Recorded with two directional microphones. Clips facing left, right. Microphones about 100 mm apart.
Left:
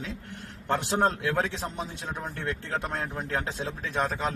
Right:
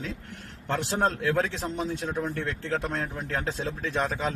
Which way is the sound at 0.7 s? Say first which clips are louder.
Left 1 dB; 15° left (ahead or behind).